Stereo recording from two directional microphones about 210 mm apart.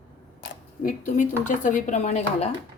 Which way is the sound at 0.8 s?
40° left (ahead or behind).